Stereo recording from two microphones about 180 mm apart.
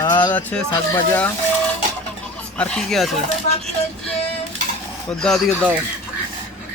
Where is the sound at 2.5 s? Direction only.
5° left (ahead or behind).